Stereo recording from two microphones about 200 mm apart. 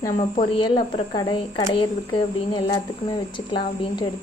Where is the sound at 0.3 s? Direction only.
25° left (ahead or behind).